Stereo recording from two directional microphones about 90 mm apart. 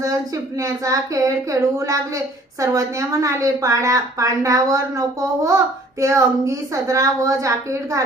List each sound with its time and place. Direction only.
0.6 s speech: 40° right (ahead or behind)